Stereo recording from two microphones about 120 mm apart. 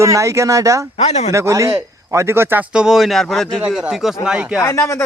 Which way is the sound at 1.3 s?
25° right (ahead or behind).